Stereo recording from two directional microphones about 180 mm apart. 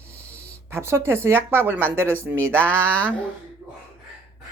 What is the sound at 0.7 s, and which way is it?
Speech, 15° right (ahead or behind).